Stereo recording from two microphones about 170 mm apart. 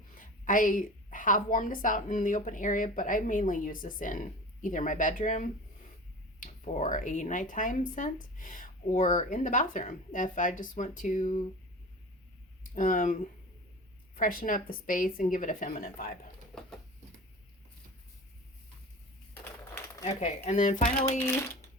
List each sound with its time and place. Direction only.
0.1 s speech: 50° left (ahead or behind)
12.7 s speech: 50° left (ahead or behind)
14.2 s speech: 55° left (ahead or behind)
16.5 s bird: 5° left (ahead or behind)
20.1 s speech: 40° left (ahead or behind)
21.2 s speech: 15° left (ahead or behind)